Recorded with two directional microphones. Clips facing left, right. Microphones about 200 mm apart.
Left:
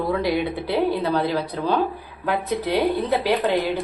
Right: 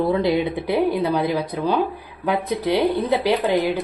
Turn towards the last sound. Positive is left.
turn(degrees=-15)  # may be behind; listen again after turning